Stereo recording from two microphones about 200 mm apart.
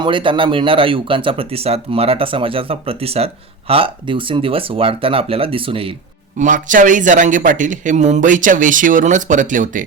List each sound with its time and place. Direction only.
0.0 s speech: 25° right (ahead or behind)
6.4 s a man's voice: 40° right (ahead or behind)